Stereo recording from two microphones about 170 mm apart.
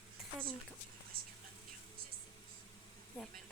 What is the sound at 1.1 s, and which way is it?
Speech, 60° right (ahead or behind).